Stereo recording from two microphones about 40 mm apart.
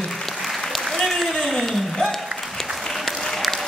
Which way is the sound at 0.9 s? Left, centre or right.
Centre.